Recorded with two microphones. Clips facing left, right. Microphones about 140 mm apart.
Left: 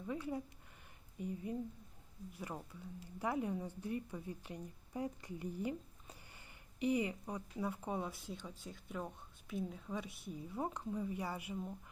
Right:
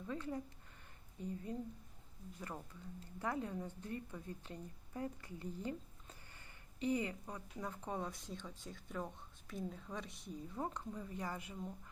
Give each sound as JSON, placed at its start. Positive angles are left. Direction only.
{"t": 0.0, "sound": "speech", "side_deg": 10}